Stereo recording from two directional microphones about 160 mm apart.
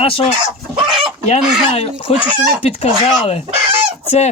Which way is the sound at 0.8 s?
Centre (ahead or behind).